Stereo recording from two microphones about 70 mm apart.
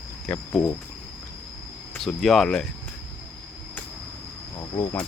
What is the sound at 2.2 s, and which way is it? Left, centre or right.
Speech, centre.